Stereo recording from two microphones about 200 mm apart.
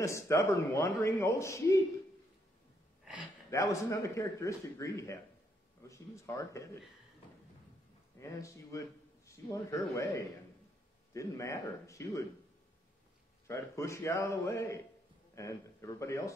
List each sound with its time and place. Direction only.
0.0 s a man's voice: 15° left (ahead or behind)
3.4 s a man's voice: 15° left (ahead or behind)
8.2 s a man's voice: 15° left (ahead or behind)
13.5 s a man's voice: 15° left (ahead or behind)